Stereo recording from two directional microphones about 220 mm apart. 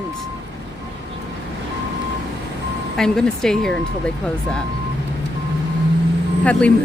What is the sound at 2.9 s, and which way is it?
Speech, 5° left (ahead or behind).